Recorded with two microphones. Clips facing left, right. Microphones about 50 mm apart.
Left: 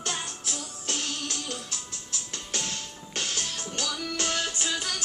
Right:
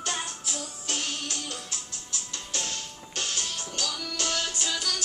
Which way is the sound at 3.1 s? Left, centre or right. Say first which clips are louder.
Even; left.